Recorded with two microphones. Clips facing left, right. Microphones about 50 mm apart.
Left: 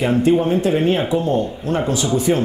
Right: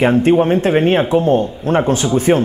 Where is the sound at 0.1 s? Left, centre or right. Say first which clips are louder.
Right 3 dB; right.